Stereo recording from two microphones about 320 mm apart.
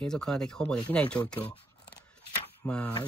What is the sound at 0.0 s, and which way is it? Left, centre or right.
Speech, centre.